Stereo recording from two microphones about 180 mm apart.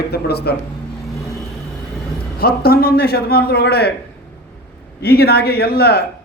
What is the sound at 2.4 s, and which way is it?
A man's voice, 60° left (ahead or behind).